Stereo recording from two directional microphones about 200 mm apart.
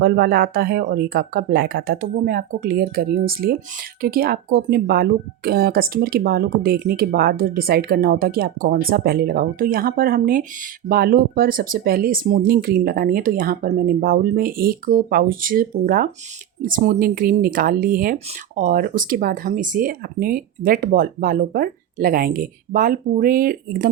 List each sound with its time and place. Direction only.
0.0 s speech: 50° right (ahead or behind)